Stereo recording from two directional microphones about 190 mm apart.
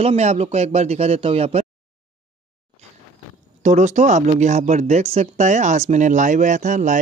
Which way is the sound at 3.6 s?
40° right (ahead or behind).